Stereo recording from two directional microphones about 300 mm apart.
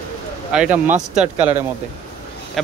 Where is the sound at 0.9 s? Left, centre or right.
Right.